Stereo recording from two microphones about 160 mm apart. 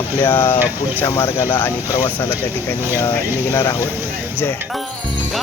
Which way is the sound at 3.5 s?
20° left (ahead or behind).